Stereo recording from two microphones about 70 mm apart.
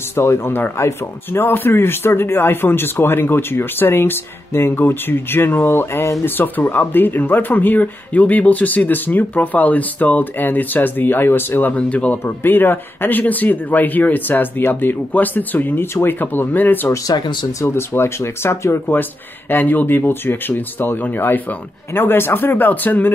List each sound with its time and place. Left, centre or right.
0.1 s speech: left
11.7 s speech: centre
12.3 s speech: left
17.1 s speech: left
17.6 s speech: left
19.5 s speech: left